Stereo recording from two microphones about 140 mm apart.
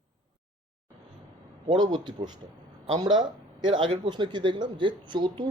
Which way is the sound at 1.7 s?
30° right (ahead or behind).